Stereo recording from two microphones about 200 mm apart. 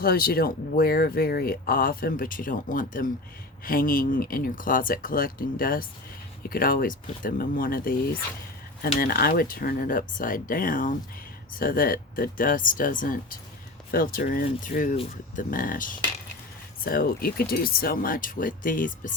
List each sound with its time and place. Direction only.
0.0 s speech: 50° left (ahead or behind)